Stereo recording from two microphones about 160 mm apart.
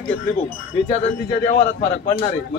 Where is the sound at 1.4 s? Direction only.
50° left (ahead or behind).